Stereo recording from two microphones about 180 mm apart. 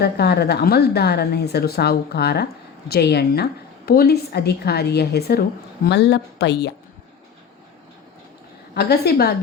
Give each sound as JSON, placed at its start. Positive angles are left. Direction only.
{"t": 0.0, "sound": "a woman's voice", "side_deg": 65}
{"t": 8.7, "sound": "a woman's voice", "side_deg": 65}